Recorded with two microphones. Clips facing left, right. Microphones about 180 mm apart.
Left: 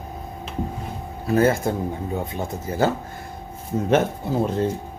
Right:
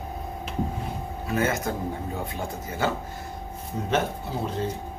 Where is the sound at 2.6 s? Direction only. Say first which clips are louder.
Left 6 dB; 40° left (ahead or behind).